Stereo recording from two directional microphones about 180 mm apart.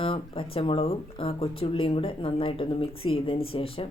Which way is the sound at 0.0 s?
30° left (ahead or behind).